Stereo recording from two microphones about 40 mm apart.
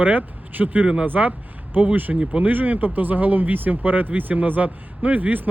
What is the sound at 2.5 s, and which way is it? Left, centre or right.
Speech, right.